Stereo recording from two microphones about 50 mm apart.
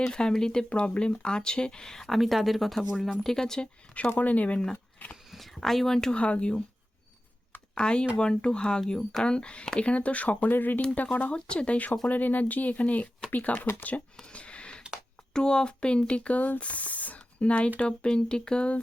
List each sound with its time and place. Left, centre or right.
0.0 s speech: centre
2.0 s speech: centre
2.9 s speech: centre
3.9 s speech: left
5.1 s speech: centre
6.1 s speech: left
7.8 s speech: centre; by 10.8 s left
10.8 s speech: left
11.3 s speech: left
12.0 s speech: left
14.2 s a sound: left
15.3 s speech: centre